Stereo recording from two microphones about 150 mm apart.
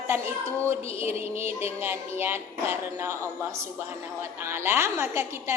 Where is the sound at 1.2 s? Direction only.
15° right (ahead or behind).